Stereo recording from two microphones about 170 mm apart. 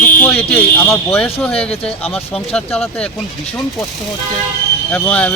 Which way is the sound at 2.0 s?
35° left (ahead or behind).